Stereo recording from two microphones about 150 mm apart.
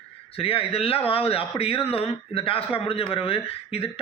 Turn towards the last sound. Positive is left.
turn(degrees=40)  # may be behind; listen again after turning